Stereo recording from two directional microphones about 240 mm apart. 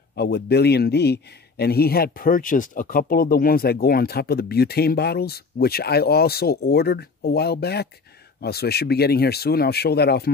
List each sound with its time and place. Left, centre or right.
0.1 s speech: left